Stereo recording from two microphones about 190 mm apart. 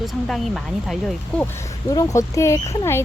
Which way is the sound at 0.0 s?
Centre (ahead or behind).